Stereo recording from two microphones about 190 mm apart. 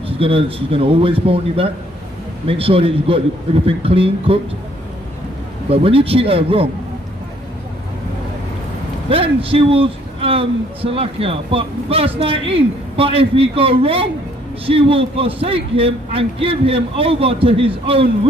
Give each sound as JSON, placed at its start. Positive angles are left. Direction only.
{"t": 0.0, "sound": "a man's voice", "side_deg": -30}
{"t": 5.7, "sound": "a man's voice", "side_deg": -30}
{"t": 9.1, "sound": "a man's voice", "side_deg": -30}